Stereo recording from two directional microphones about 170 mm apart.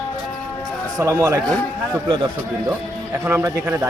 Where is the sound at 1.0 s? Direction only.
15° right (ahead or behind).